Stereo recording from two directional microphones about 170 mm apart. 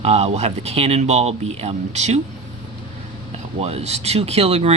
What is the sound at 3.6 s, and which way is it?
Speech, 40° right (ahead or behind).